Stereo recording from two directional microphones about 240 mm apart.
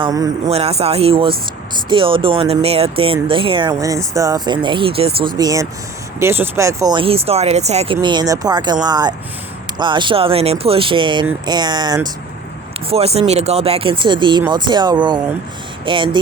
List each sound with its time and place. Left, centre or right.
0.0 s speech: centre
7.9 s speech: centre